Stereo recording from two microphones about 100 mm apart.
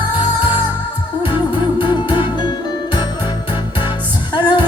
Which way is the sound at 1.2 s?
45° left (ahead or behind).